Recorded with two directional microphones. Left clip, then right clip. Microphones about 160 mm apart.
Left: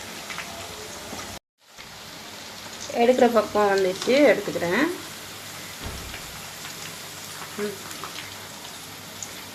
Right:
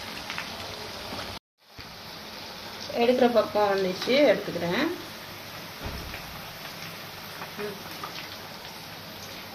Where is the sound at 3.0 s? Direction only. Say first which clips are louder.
Left 3 dB; 35° left (ahead or behind).